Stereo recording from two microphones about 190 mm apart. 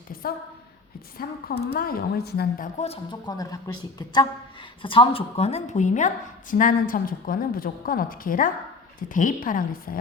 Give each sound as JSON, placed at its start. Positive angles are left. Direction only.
{"t": 0.1, "sound": "a woman's voice", "side_deg": 50}
{"t": 2.7, "sound": "a woman's voice", "side_deg": 30}